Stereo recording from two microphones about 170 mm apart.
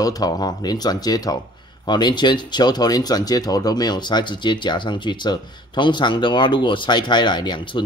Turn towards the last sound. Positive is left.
turn(degrees=25)  # may be behind; listen again after turning